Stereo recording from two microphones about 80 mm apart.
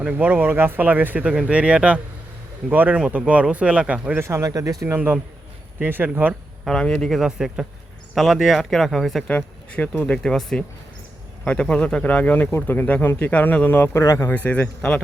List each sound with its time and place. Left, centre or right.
0.0 s speech: centre
4.2 s speech: right
4.9 s speech: right
6.7 s speech: centre
7.1 s speech: centre
9.2 s speech: centre
11.4 s speech: centre; by 14.3 s left
14.3 s speech: centre